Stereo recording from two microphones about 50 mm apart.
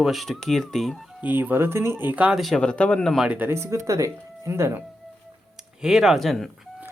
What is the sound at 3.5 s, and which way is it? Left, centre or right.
Speech, right.